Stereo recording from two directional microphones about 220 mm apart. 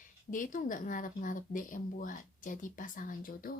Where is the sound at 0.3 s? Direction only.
35° left (ahead or behind).